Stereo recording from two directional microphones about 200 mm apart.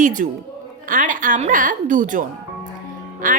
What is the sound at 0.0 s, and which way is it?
A woman's voice, 40° right (ahead or behind).